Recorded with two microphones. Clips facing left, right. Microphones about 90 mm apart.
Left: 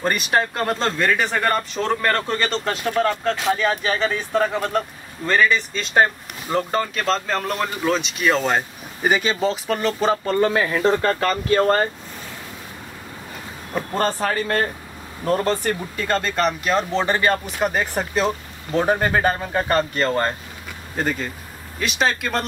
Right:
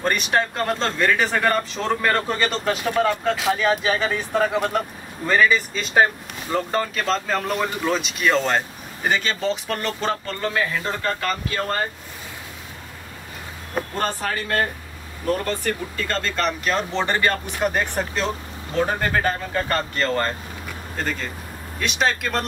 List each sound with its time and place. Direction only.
0.0 s speech: 5° left (ahead or behind)
10.2 s speech: 20° left (ahead or behind)
10.7 s speech: 35° left (ahead or behind)
13.9 s speech: 45° left (ahead or behind)
15.4 s speech: 30° left (ahead or behind)
16.1 s speech: 10° left (ahead or behind)
16.4 s speech: centre (ahead or behind)
18.8 s speech: 20° left (ahead or behind)
21.7 s speech: centre (ahead or behind)